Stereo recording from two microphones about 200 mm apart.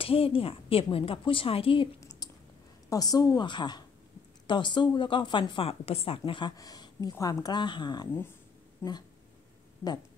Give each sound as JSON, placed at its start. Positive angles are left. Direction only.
{"t": 0.0, "sound": "speech", "side_deg": 25}
{"t": 2.2, "sound": "a sound", "side_deg": 20}
{"t": 2.9, "sound": "speech", "side_deg": 20}